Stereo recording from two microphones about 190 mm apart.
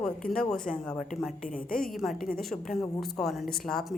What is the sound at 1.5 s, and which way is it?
Speech, 50° left (ahead or behind).